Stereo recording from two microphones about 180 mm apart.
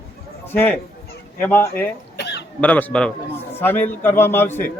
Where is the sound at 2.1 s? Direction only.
70° left (ahead or behind).